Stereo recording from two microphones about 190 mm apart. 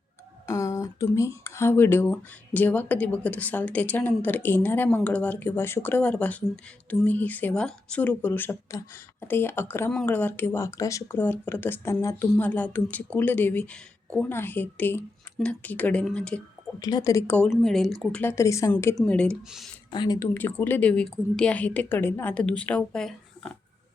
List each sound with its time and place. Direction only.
0.4 s speech: 15° left (ahead or behind)
16.8 s speech: 20° left (ahead or behind)
19.9 s speech: 20° left (ahead or behind); by 23.5 s 5° left (ahead or behind)